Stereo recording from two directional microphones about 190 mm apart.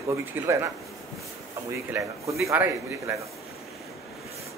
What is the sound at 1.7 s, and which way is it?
A man's voice, 15° right (ahead or behind).